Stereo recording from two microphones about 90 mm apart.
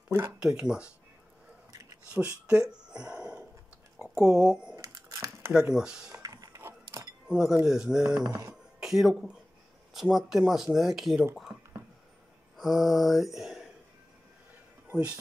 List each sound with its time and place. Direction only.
0.4 s speech: 10° right (ahead or behind)
1.7 s a sound: 40° right (ahead or behind)
2.2 s speech: 10° right (ahead or behind)
2.9 s a sound: 10° right (ahead or behind)
4.1 s speech: 5° right (ahead or behind)
4.7 s a sound: 35° right (ahead or behind)
5.5 s speech: 10° right (ahead or behind)
6.2 s printer: 40° right (ahead or behind)
6.6 s a sound: 30° right (ahead or behind)
7.2 s speech: 10° right (ahead or behind)
8.3 s speech: 40° right (ahead or behind)
8.7 s speech: 5° right (ahead or behind)
12.5 s speech: centre (ahead or behind)
14.9 s speech: 15° right (ahead or behind)